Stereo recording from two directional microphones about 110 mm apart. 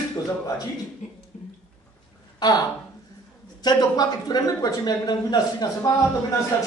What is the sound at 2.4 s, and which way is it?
Speech, 40° left (ahead or behind).